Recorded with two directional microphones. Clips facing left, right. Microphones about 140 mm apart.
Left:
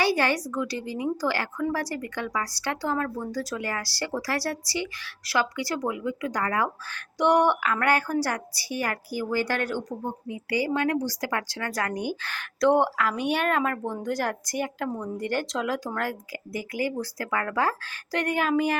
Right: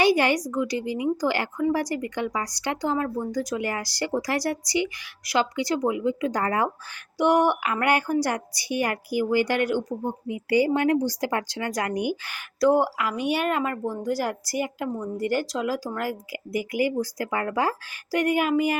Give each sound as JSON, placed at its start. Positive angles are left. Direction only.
{"t": 0.0, "sound": "a woman's voice", "side_deg": -15}
{"t": 6.9, "sound": "a woman's voice", "side_deg": -10}